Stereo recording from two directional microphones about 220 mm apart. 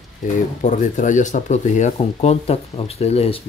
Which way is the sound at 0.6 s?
35° left (ahead or behind).